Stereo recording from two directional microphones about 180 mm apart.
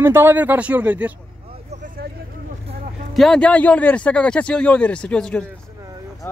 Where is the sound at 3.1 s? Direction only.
Centre (ahead or behind).